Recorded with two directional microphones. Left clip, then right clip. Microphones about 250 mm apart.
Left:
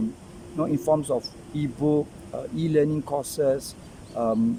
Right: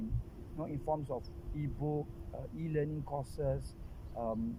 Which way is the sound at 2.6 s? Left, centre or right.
Centre.